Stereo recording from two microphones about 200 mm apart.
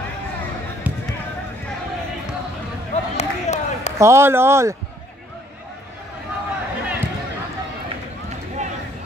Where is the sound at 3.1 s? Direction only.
35° left (ahead or behind).